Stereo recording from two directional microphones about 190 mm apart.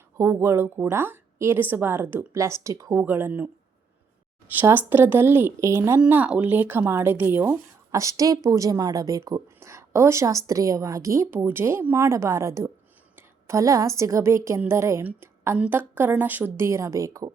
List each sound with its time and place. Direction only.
0.2 s a woman's voice: 15° right (ahead or behind)
4.6 s a woman's voice: 10° right (ahead or behind)